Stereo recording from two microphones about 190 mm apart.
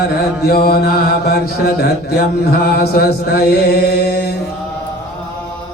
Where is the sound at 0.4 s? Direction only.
55° left (ahead or behind).